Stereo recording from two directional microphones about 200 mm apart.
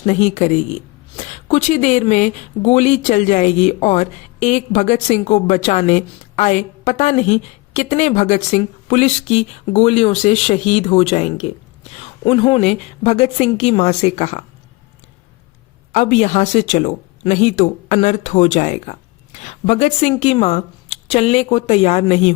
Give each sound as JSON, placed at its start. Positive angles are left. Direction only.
{"t": 0.0, "sound": "speech", "side_deg": 35}
{"t": 15.9, "sound": "speech", "side_deg": 35}